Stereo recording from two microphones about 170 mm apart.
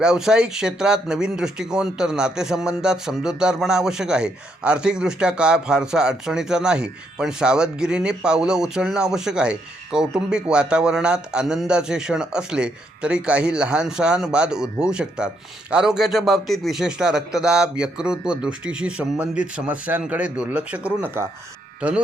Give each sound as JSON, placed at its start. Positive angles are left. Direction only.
{"t": 0.0, "sound": "speech", "side_deg": -5}